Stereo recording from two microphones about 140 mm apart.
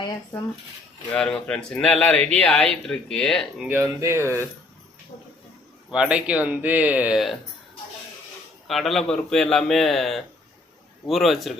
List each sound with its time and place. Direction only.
1.1 s speech: 5° left (ahead or behind)
3.6 s speech: 15° right (ahead or behind)
4.2 s speech: 15° left (ahead or behind)
5.9 s speech: 5° right (ahead or behind)
8.6 s a man's voice: centre (ahead or behind)